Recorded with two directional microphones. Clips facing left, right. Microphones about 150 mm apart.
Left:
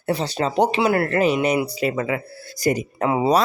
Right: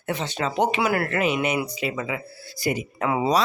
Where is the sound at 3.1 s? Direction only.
25° left (ahead or behind).